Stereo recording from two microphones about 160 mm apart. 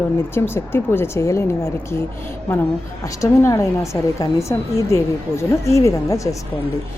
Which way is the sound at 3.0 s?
20° left (ahead or behind).